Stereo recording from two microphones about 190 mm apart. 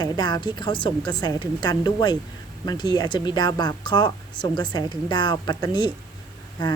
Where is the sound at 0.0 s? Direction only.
20° left (ahead or behind).